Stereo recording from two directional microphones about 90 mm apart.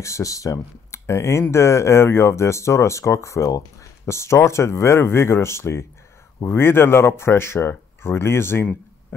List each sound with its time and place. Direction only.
0.0 s speech: 35° left (ahead or behind)